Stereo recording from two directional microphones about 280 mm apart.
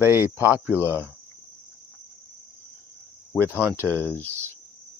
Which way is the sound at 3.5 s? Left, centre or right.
Centre.